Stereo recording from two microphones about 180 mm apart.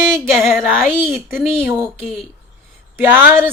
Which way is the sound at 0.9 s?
5° left (ahead or behind).